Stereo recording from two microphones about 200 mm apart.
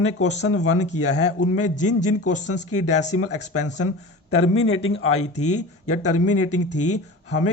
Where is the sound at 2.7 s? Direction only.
90° left.